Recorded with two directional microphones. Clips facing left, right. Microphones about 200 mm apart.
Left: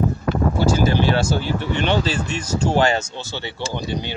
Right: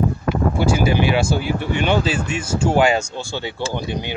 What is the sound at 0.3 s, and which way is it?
Speech, 10° right (ahead or behind).